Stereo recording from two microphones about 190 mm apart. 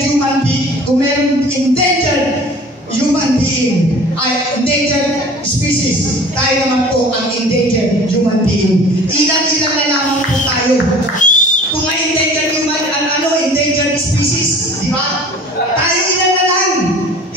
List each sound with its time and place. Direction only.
11.1 s whistle: 40° left (ahead or behind)